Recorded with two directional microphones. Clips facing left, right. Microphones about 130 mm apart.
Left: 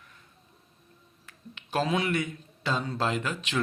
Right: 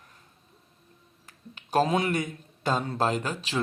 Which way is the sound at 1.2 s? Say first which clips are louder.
Even; 40° right (ahead or behind).